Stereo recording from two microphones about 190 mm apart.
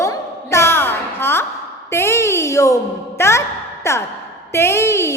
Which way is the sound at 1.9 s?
15° left (ahead or behind).